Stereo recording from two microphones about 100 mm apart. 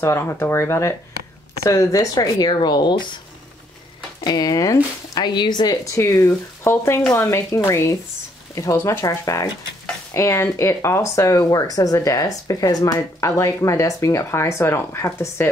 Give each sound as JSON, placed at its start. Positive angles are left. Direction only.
{"t": 0.0, "sound": "speech", "side_deg": 25}
{"t": 4.2, "sound": "speech", "side_deg": 40}
{"t": 5.9, "sound": "speech", "side_deg": 30}